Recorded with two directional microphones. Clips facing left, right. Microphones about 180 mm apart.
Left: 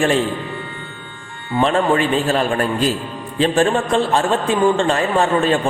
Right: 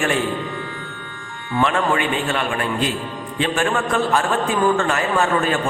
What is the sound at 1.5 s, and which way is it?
A man's voice, 35° left (ahead or behind).